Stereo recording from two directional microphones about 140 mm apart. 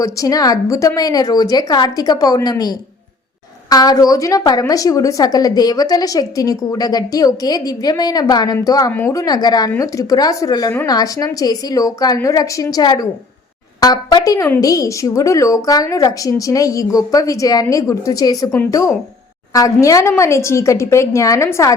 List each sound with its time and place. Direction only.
0.0 s speech: 25° left (ahead or behind)
8.9 s speech: 15° left (ahead or behind)
9.1 s speech: 30° left (ahead or behind)